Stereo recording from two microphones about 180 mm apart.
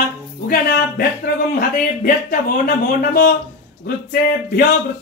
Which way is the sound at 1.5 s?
50° left (ahead or behind).